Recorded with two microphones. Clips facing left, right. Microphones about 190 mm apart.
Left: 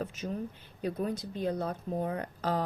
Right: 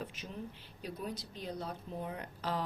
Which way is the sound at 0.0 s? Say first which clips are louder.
Left 8 dB; 45° left (ahead or behind).